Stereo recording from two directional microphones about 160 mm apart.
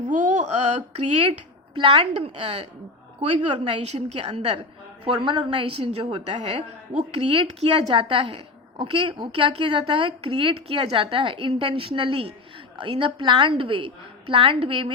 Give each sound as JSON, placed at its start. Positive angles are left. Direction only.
{"t": 0.1, "sound": "a woman's voice", "side_deg": -50}